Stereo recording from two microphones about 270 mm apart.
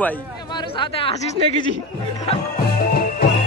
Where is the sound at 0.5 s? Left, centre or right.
Centre.